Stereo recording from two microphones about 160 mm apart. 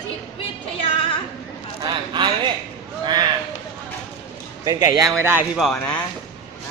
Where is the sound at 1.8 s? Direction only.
30° right (ahead or behind).